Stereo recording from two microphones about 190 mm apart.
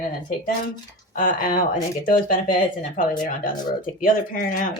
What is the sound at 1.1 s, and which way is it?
Speech, 45° left (ahead or behind).